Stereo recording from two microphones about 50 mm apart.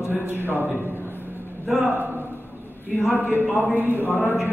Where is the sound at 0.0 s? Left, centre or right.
Right.